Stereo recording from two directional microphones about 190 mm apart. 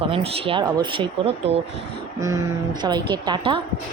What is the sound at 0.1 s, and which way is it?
Speech, 30° right (ahead or behind).